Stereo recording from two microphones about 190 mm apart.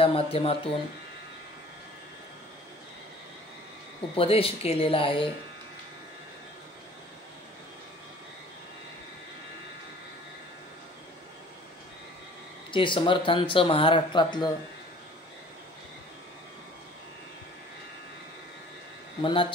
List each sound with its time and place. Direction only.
0.0 s speech: 30° left (ahead or behind)
4.1 s speech: 30° left (ahead or behind)
12.7 s speech: 25° left (ahead or behind)
19.2 s speech: 25° left (ahead or behind)